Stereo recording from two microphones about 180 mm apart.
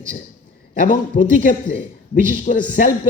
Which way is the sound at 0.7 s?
45° left (ahead or behind).